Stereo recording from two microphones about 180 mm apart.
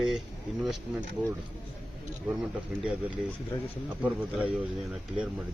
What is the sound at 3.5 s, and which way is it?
Speech, 20° left (ahead or behind).